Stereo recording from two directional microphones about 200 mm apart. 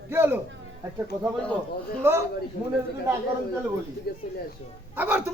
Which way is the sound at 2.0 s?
10° right (ahead or behind).